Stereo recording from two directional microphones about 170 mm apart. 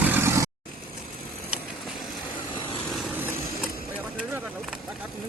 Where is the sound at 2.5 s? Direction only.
30° left (ahead or behind).